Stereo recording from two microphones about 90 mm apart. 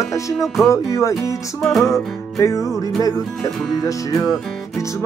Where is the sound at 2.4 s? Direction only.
35° left (ahead or behind).